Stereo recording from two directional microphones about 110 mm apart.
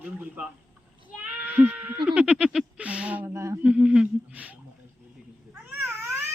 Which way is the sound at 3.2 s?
25° right (ahead or behind).